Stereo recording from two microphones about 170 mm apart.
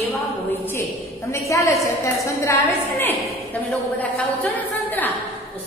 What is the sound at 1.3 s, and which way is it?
A woman's voice, 15° left (ahead or behind).